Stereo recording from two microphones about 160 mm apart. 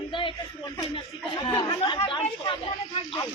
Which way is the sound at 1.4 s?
30° left (ahead or behind).